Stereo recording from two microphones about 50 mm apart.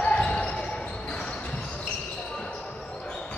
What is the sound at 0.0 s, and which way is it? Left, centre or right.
Basketball bounce, left.